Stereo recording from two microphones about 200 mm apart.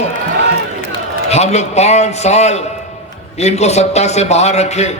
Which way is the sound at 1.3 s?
35° left (ahead or behind).